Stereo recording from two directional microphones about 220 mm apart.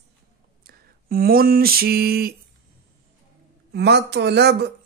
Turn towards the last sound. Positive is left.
turn(degrees=-50)  # may be behind; listen again after turning